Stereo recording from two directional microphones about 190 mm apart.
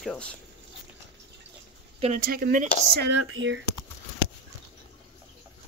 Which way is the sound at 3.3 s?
85° right.